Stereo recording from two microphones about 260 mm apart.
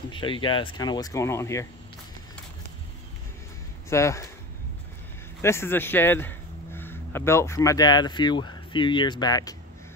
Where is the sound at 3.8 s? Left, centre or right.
Centre.